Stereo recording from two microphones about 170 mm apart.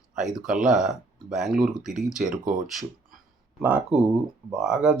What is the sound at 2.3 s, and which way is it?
Speech, 50° right (ahead or behind).